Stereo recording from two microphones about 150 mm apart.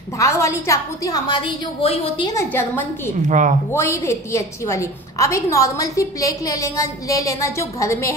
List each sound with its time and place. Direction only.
0.2 s a woman's voice: 20° left (ahead or behind); by 2.2 s 35° left (ahead or behind)
2.2 s a woman's voice: 15° left (ahead or behind)
3.3 s a woman's voice: 60° right (ahead or behind)
3.7 s a woman's voice: 20° left (ahead or behind)